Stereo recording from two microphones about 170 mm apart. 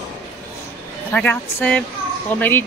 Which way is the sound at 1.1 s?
10° left (ahead or behind).